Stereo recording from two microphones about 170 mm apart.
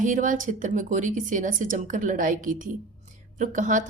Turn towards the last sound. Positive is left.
turn(degrees=-45)  # may be behind; listen again after turning